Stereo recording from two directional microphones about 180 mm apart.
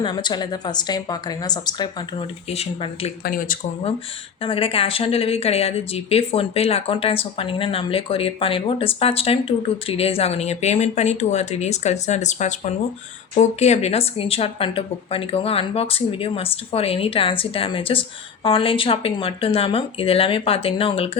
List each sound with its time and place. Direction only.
0.0 s a woman's voice: 25° left (ahead or behind)
2.5 s speech: 35° left (ahead or behind)
3.2 s speech: 50° left (ahead or behind)
4.4 s speech: 30° left (ahead or behind)